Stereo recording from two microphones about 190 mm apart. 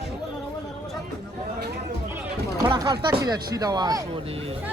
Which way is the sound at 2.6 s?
20° right (ahead or behind).